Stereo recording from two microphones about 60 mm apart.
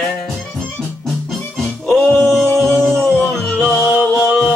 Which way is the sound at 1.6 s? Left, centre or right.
Centre.